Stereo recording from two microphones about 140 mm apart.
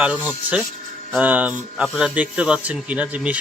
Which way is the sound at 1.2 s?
10° right (ahead or behind).